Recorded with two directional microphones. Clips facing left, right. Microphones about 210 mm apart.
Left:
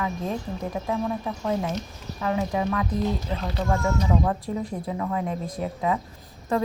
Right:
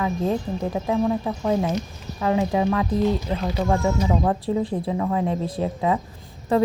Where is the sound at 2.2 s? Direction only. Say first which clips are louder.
Right 5 dB; 25° right (ahead or behind).